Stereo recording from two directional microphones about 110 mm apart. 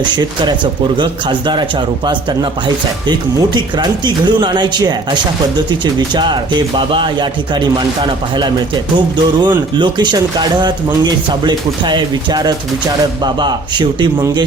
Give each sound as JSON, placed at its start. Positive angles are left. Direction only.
{"t": 0.0, "sound": "speech", "side_deg": -40}
{"t": 9.0, "sound": "speech", "side_deg": -45}